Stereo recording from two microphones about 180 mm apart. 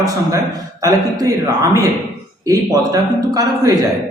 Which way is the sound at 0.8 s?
20° right (ahead or behind).